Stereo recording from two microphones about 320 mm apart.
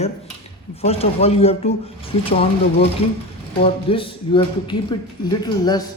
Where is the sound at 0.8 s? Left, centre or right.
Centre.